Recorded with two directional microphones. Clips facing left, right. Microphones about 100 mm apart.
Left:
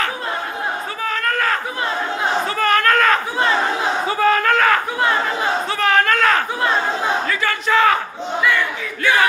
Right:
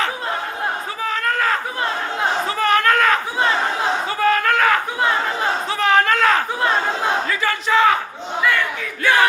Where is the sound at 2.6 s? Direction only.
20° right (ahead or behind).